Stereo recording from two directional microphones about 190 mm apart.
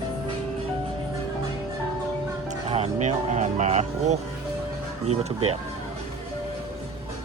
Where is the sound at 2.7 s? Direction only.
35° right (ahead or behind).